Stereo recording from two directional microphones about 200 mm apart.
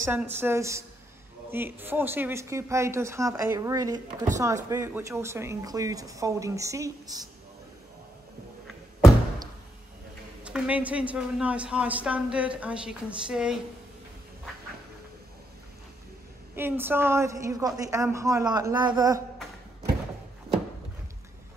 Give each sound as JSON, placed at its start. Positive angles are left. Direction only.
{"t": 0.0, "sound": "a woman's voice", "side_deg": -10}
{"t": 10.4, "sound": "a woman's voice", "side_deg": -5}
{"t": 16.5, "sound": "a woman's voice", "side_deg": -10}